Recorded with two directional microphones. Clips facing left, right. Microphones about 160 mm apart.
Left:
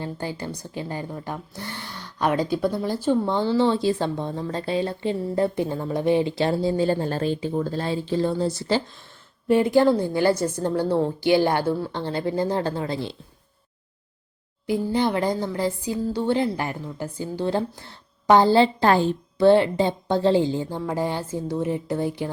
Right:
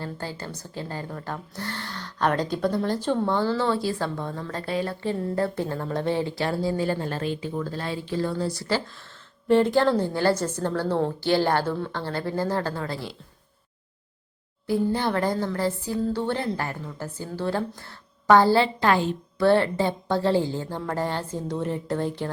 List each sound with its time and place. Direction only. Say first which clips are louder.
0.0 s speech: left 3 dB; 15° left (ahead or behind)
14.9 s speech: left 2 dB; 15° left (ahead or behind); by 19.1 s 35° left (ahead or behind)
19.4 s speech: left 3 dB; 20° left (ahead or behind)